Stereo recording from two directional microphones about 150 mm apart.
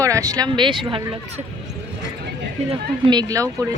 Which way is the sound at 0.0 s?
20° right (ahead or behind).